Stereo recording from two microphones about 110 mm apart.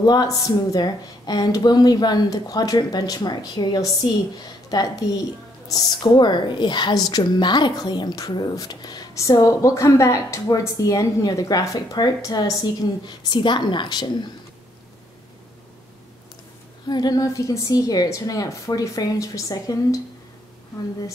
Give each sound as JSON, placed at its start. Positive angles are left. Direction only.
{"t": 0.0, "sound": "a woman's voice", "side_deg": 40}
{"t": 13.0, "sound": "a woman's voice", "side_deg": 45}
{"t": 16.8, "sound": "a woman's voice", "side_deg": 40}